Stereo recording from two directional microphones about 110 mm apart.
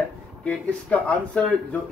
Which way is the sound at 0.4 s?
10° left (ahead or behind).